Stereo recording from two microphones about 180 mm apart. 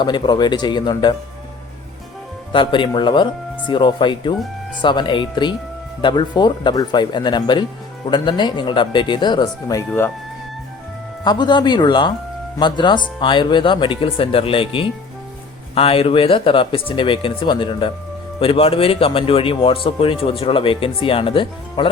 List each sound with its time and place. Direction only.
0.0 s speech: 25° left (ahead or behind)
2.5 s speech: 25° left (ahead or behind)
11.2 s speech: 25° left (ahead or behind)